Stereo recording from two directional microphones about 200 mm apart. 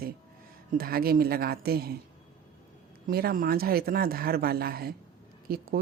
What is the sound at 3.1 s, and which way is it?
Speech, 50° right (ahead or behind).